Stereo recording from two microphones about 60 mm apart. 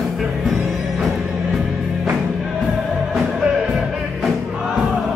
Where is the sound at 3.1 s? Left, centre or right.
Centre.